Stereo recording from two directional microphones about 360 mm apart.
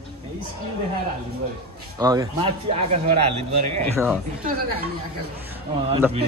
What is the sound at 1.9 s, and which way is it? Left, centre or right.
A man's voice, centre.